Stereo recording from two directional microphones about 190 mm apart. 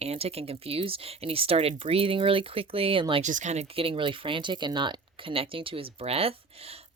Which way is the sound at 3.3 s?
40° right (ahead or behind).